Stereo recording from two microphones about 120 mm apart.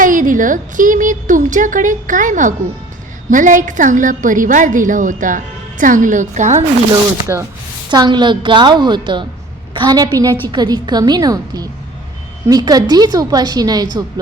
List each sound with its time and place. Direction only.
0.0 s a woman's voice: 90° right
7.3 s speech: 20° right (ahead or behind)
7.9 s a woman's voice: 40° right (ahead or behind)